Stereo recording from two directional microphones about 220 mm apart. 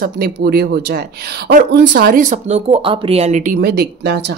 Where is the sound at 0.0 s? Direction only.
45° right (ahead or behind).